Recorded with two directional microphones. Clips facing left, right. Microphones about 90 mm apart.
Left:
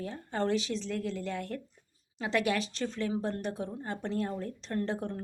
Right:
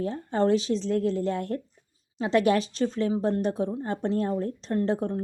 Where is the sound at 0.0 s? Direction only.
30° right (ahead or behind).